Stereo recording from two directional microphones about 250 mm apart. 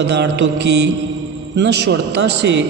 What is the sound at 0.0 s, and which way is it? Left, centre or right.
A man's voice, right.